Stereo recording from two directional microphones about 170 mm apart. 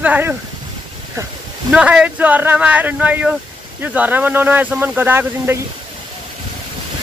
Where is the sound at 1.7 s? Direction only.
5° right (ahead or behind).